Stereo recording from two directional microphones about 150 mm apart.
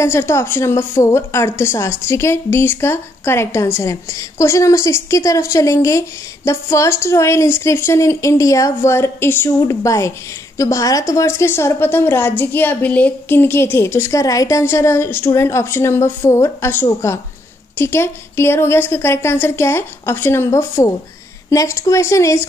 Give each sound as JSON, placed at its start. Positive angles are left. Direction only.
{"t": 0.0, "sound": "a woman's voice", "side_deg": 15}